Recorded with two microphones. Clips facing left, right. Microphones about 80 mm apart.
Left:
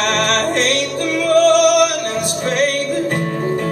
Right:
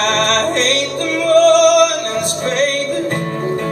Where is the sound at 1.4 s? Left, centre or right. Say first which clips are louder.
Right 2 dB; right.